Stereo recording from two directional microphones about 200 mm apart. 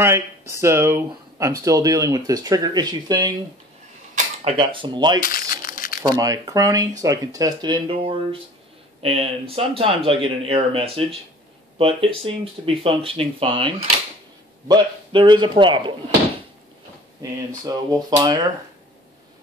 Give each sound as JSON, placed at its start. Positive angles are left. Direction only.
{"t": 0.0, "sound": "speech", "side_deg": -15}
{"t": 4.5, "sound": "speech", "side_deg": -25}
{"t": 5.3, "sound": "crumpling", "side_deg": 45}
{"t": 6.1, "sound": "speech", "side_deg": -15}
{"t": 17.6, "sound": "speech", "side_deg": -20}